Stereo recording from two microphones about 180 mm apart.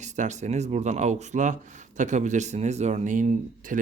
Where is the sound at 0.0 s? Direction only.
40° right (ahead or behind).